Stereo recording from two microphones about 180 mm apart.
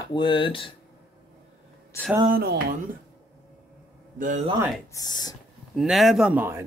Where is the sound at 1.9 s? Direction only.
15° left (ahead or behind).